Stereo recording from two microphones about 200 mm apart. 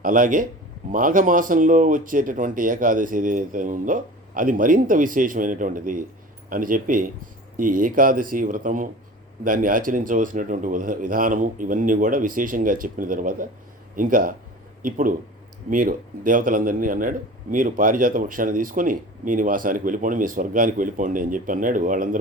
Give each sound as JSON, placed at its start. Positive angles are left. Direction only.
{"t": 0.0, "sound": "speech", "side_deg": -40}